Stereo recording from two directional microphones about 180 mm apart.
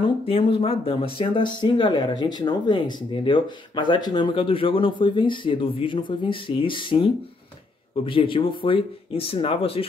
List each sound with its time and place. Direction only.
0.0 s speech: 30° left (ahead or behind)